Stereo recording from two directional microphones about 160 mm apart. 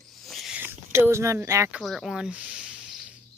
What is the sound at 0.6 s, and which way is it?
Speech, 15° right (ahead or behind).